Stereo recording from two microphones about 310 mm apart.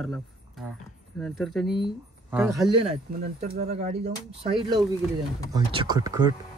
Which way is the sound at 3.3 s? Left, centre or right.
Right.